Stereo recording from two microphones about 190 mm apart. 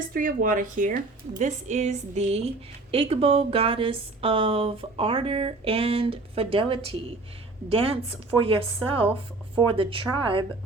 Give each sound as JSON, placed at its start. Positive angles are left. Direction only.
{"t": 0.1, "sound": "a woman's voice", "side_deg": -45}